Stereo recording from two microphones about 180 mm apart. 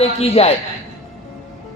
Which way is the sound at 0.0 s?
35° left (ahead or behind).